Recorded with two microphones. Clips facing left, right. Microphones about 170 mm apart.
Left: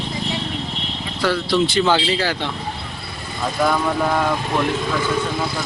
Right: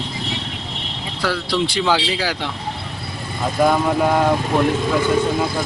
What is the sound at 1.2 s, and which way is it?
Speech, 5° right (ahead or behind).